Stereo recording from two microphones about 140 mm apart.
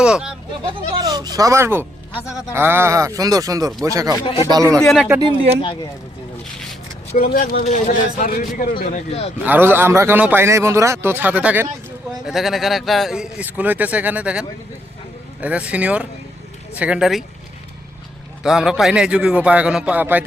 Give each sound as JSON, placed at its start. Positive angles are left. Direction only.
{"t": 0.0, "sound": "speech", "side_deg": -5}
{"t": 0.9, "sound": "speech", "side_deg": -30}
{"t": 4.3, "sound": "speech", "side_deg": 35}
{"t": 4.5, "sound": "speech", "side_deg": -25}
{"t": 4.8, "sound": "speech", "side_deg": 0}
{"t": 7.2, "sound": "speech", "side_deg": 90}
{"t": 7.6, "sound": "a man's voice", "side_deg": 55}
{"t": 8.8, "sound": "speech", "side_deg": 50}
{"t": 9.4, "sound": "a man's voice", "side_deg": -15}
{"t": 18.4, "sound": "a man's voice", "side_deg": -5}